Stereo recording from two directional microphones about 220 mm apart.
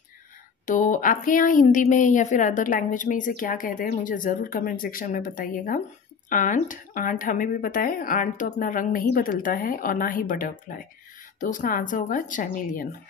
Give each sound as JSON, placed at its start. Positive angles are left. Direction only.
{"t": 0.7, "sound": "speech", "side_deg": 35}